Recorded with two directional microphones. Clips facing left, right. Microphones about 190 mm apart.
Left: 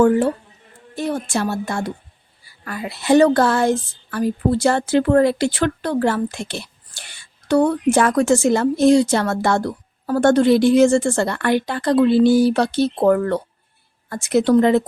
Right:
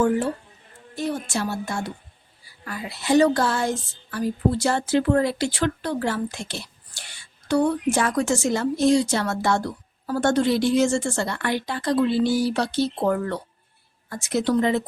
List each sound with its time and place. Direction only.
0.9 s a woman's voice: 60° left (ahead or behind)